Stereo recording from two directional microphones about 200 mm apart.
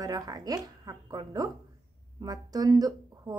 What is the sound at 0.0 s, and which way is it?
Speech, 20° right (ahead or behind).